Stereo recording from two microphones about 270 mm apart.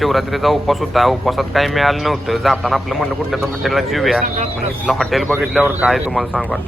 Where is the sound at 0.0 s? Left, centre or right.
Centre.